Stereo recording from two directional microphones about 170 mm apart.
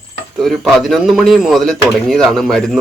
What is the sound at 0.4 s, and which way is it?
Speech, centre (ahead or behind).